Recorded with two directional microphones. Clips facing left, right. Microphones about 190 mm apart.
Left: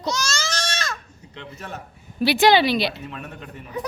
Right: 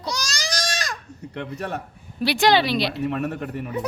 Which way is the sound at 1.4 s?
60° right (ahead or behind).